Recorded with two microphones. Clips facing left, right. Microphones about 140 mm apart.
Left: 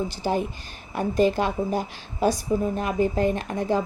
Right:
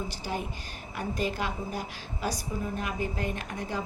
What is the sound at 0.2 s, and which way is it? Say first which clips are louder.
A woman's voice: left 9 dB; 30° left (ahead or behind).